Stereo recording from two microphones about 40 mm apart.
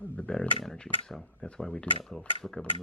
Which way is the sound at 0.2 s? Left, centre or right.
Left.